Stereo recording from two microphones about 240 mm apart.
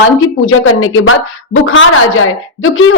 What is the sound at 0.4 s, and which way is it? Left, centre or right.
A woman's voice, left.